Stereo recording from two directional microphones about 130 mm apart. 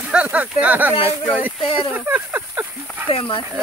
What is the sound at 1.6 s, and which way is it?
Speech, 40° left (ahead or behind).